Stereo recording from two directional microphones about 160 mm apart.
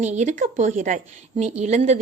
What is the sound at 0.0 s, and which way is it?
Speech, 45° right (ahead or behind).